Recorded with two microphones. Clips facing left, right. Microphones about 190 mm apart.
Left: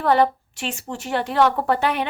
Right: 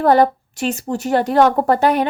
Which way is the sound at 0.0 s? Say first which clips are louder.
Right 5 dB; 40° right (ahead or behind).